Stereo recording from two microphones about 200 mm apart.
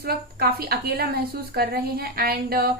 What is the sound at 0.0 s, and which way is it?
A woman's voice, 50° right (ahead or behind).